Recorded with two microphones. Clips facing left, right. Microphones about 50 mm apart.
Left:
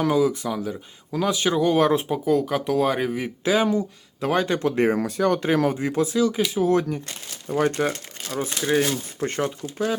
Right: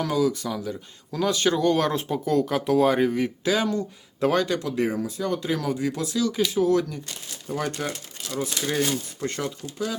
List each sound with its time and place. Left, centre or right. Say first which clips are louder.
0.0 s speech: left 3 dB; left
4.9 s speech: left 5 dB; left; by 6.7 s centre
6.7 s speech: left 1 dB; left
8.6 s speech: left 5 dB; centre
9.2 s speech: left 7 dB; left